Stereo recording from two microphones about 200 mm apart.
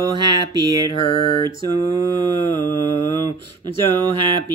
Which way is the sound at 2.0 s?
20° right (ahead or behind).